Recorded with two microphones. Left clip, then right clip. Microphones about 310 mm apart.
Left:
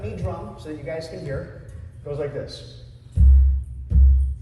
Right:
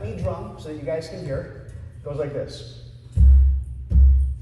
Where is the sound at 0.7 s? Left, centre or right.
Right.